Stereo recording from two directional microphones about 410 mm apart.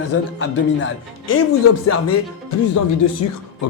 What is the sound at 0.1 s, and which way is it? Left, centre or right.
Speech, left.